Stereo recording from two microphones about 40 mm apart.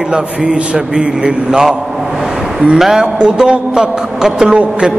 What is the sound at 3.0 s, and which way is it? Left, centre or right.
A man's voice, right.